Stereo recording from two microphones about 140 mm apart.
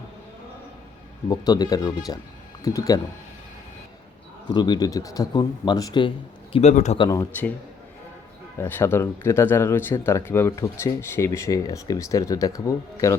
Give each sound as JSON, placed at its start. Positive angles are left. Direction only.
{"t": 1.3, "sound": "speech", "side_deg": 30}
{"t": 4.4, "sound": "speech", "side_deg": 30}
{"t": 6.5, "sound": "a man's voice", "side_deg": 50}
{"t": 7.1, "sound": "speech", "side_deg": 20}
{"t": 8.5, "sound": "speech", "side_deg": 15}